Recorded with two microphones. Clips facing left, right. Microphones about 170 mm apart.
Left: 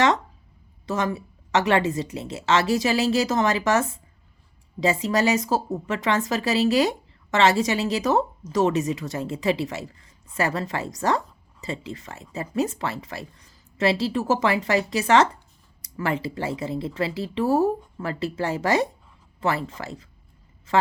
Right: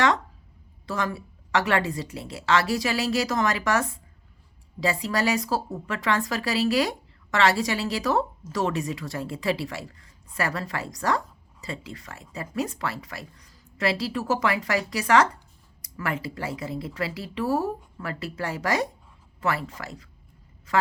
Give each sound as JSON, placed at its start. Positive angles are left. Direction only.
{"t": 0.9, "sound": "a woman's voice", "side_deg": 20}